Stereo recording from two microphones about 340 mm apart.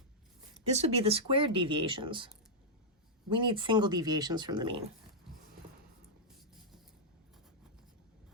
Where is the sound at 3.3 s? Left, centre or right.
Centre.